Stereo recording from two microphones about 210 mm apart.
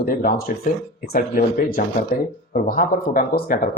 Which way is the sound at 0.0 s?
45° left (ahead or behind).